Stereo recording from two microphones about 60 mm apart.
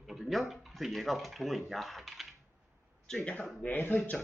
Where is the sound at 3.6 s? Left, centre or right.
Left.